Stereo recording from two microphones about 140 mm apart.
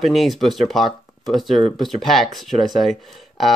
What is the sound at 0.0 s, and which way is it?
Speech, centre (ahead or behind).